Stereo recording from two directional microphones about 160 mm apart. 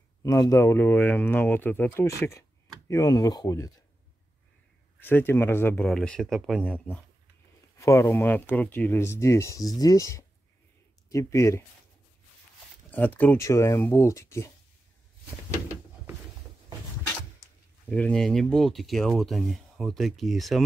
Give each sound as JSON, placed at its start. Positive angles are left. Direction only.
{"t": 0.2, "sound": "speech", "side_deg": 20}
{"t": 5.0, "sound": "speech", "side_deg": 15}
{"t": 7.8, "sound": "speech", "side_deg": 15}
{"t": 12.9, "sound": "speech", "side_deg": 10}
{"t": 17.8, "sound": "speech", "side_deg": 5}